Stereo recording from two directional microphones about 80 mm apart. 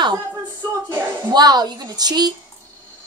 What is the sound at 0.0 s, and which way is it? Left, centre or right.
Speech, right.